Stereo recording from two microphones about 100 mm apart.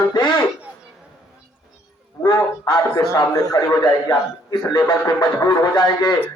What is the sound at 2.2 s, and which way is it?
Speech, 40° left (ahead or behind).